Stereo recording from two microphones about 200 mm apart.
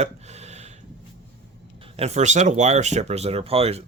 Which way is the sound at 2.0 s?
35° right (ahead or behind).